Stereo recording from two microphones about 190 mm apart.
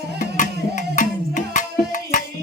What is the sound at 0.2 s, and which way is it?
Music, 40° left (ahead or behind).